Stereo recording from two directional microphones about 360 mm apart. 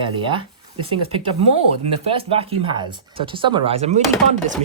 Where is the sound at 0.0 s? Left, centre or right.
Centre.